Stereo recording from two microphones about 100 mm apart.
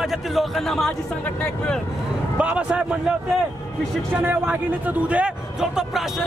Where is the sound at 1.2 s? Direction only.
15° left (ahead or behind).